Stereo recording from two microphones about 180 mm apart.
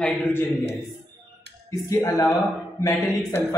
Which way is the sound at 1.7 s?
20° left (ahead or behind).